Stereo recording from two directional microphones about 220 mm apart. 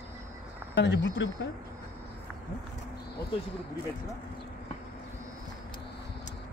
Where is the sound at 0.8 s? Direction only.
55° left (ahead or behind).